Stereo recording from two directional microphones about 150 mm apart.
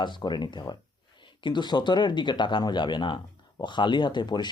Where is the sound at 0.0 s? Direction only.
30° left (ahead or behind).